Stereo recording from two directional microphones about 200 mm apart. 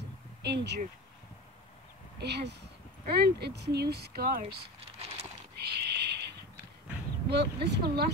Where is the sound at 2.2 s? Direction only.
55° right (ahead or behind).